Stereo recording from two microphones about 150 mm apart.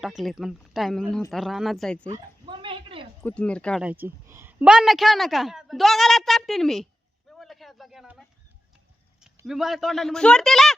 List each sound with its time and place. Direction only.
0.0 s a woman's voice: centre (ahead or behind)
2.5 s dog: 35° right (ahead or behind)
3.2 s speech: 10° left (ahead or behind)
3.8 s a woman's voice: 10° right (ahead or behind)
7.3 s a sound: centre (ahead or behind)
9.5 s a woman's voice: centre (ahead or behind)